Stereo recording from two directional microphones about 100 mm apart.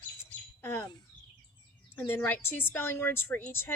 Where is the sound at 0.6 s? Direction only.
25° left (ahead or behind).